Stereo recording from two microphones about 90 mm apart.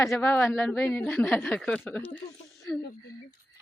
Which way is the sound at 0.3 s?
25° left (ahead or behind).